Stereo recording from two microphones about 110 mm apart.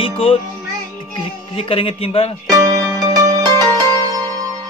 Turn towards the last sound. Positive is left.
turn(degrees=-35)  # may be behind; listen again after turning